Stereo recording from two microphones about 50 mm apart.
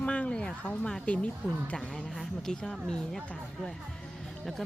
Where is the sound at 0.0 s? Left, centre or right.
Left.